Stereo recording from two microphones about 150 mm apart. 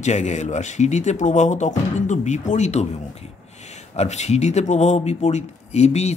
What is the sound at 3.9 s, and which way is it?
Speech, 50° left (ahead or behind).